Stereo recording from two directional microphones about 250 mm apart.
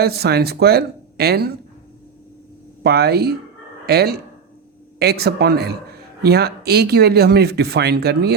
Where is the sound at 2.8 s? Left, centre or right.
Right.